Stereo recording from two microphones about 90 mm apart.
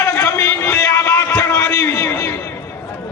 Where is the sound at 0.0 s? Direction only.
35° left (ahead or behind).